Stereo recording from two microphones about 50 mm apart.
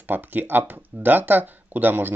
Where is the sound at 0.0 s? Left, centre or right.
Right.